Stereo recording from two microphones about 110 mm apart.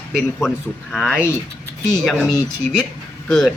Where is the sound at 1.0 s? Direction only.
20° left (ahead or behind).